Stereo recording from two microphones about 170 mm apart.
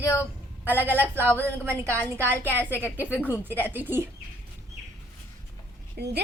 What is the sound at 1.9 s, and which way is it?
Speech, 10° left (ahead or behind).